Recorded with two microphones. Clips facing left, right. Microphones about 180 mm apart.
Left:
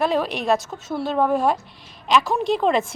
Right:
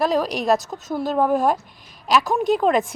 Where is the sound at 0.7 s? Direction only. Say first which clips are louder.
Right 1 dB; 20° right (ahead or behind).